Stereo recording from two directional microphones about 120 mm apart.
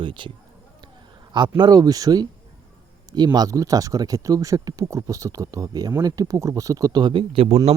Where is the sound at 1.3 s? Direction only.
40° right (ahead or behind).